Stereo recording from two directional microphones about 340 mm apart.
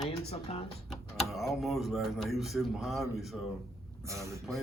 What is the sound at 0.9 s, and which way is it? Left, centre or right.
Speech, centre.